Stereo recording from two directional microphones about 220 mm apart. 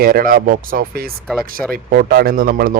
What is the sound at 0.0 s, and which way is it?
Speech, 40° right (ahead or behind).